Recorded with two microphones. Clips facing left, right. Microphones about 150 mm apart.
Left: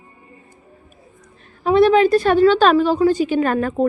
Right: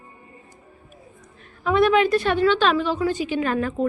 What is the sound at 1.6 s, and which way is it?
A woman's voice, 35° left (ahead or behind).